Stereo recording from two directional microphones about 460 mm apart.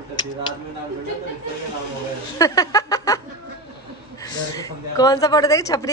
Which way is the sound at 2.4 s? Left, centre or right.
Centre.